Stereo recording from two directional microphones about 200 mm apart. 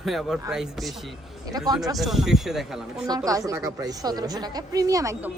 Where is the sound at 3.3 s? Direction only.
15° right (ahead or behind).